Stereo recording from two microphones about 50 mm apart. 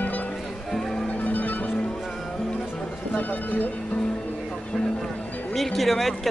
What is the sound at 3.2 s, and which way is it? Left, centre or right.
Speech, left.